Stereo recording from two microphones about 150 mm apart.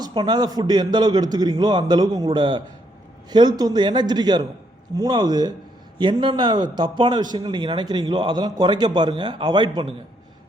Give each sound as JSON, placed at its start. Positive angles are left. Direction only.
{"t": 0.0, "sound": "a man's voice", "side_deg": -30}